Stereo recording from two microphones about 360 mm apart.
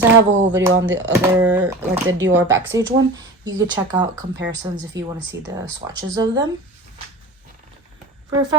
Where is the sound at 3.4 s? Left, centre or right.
Centre.